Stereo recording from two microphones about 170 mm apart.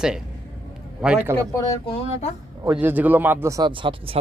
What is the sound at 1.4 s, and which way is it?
Speech, 20° left (ahead or behind).